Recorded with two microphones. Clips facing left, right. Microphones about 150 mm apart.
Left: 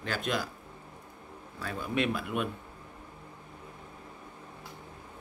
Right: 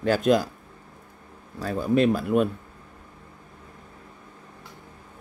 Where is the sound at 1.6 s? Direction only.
40° right (ahead or behind).